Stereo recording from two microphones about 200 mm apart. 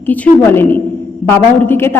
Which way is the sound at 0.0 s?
10° left (ahead or behind).